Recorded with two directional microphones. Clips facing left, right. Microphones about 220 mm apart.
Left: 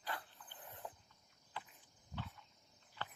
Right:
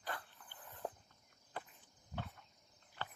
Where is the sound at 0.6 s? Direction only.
20° left (ahead or behind).